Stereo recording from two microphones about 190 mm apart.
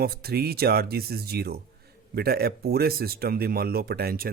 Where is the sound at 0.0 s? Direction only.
55° right (ahead or behind).